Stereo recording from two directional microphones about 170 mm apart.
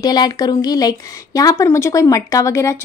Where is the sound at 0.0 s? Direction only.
25° left (ahead or behind).